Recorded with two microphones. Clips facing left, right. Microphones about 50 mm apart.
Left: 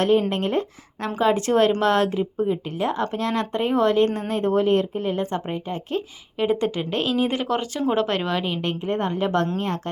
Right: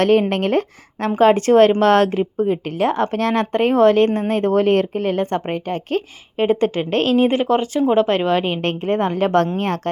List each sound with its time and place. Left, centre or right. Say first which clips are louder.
0.0 s speech: right 4 dB; right
1.1 s speech: right 7 dB; right
5.2 s speech: right 5 dB; right
6.3 s a woman's voice: right 5 dB; right
7.3 s a woman's voice: right 7 dB; right
8.6 s a woman's voice: right 5 dB; right